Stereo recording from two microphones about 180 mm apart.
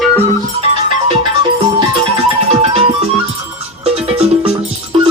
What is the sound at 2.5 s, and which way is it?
Music, 35° right (ahead or behind).